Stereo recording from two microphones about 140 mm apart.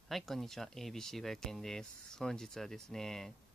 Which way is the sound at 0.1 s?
Centre (ahead or behind).